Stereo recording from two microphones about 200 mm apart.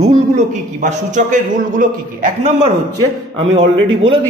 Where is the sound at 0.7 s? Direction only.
40° right (ahead or behind).